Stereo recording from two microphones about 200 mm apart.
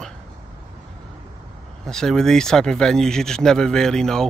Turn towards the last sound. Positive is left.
turn(degrees=5)  # may be behind; listen again after turning